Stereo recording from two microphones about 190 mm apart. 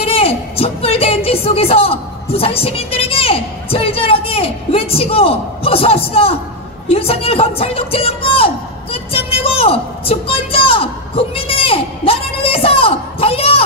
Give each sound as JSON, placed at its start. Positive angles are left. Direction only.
{"t": 0.0, "sound": "a woman's voice", "side_deg": 30}